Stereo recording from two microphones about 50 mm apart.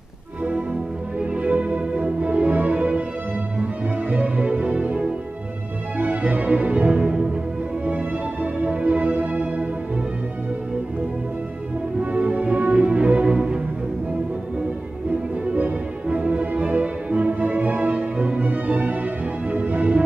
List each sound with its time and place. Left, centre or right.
1.3 s music: right
4.1 s music: right
12.0 s music: right
15.4 s music: right